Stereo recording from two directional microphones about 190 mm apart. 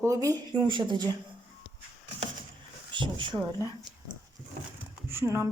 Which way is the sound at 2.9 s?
25° right (ahead or behind).